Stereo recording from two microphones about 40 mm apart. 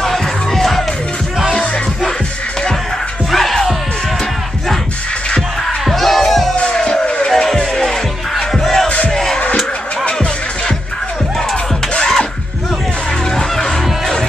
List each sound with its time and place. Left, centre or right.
0.0 s music: centre
3.3 s music: centre
5.9 s music: centre
6.6 s music: centre
9.1 s a sound: centre
11.9 s music: centre
13.4 s music: centre